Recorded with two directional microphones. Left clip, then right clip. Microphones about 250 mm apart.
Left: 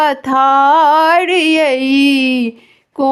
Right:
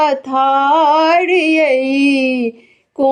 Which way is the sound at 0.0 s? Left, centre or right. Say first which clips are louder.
Left 2 dB; left.